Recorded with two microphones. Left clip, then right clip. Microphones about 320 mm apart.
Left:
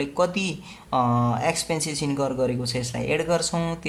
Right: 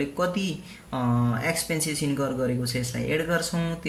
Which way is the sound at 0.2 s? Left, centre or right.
Centre.